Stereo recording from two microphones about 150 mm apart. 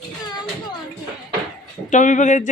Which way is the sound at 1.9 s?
55° left (ahead or behind).